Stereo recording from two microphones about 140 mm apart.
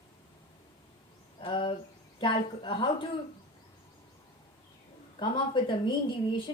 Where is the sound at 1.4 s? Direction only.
35° left (ahead or behind).